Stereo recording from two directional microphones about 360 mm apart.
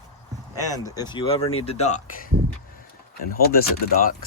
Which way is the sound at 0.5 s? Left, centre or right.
Centre.